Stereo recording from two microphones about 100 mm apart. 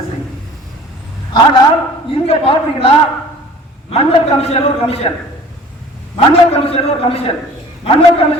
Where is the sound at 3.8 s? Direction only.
90° left.